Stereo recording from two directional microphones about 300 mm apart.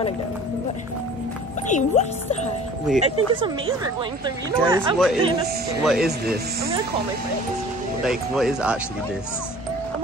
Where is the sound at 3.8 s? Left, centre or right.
Centre.